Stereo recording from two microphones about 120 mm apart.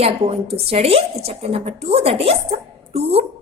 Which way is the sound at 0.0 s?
55° right (ahead or behind).